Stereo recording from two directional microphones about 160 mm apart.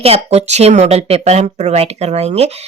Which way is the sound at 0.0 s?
40° right (ahead or behind).